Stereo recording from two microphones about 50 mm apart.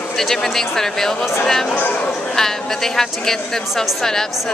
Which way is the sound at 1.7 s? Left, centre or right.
Left.